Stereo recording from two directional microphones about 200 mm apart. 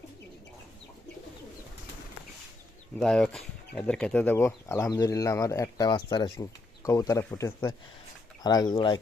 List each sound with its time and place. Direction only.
3.0 s speech: 5° left (ahead or behind); by 9.0 s 20° left (ahead or behind)